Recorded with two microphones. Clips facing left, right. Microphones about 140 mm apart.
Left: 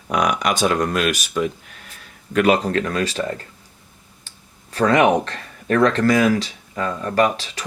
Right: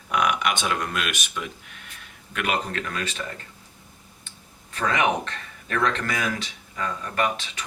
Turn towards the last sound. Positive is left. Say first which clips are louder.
# left 7 dB
turn(degrees=35)  # may be behind; listen again after turning